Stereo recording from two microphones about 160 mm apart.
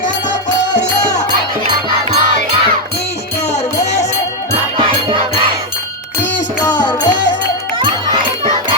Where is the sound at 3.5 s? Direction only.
45° left (ahead or behind).